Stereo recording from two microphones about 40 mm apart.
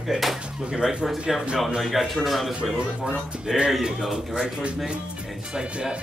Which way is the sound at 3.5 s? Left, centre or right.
Right.